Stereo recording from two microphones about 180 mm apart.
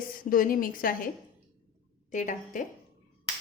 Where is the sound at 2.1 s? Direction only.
45° left (ahead or behind).